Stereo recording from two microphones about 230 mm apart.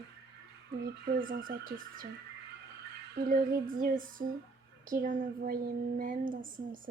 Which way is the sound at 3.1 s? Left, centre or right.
Right.